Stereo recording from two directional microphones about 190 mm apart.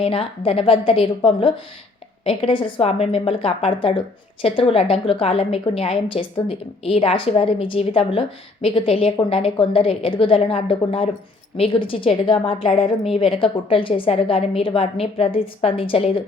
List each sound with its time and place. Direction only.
0.0 s a woman's voice: 30° left (ahead or behind)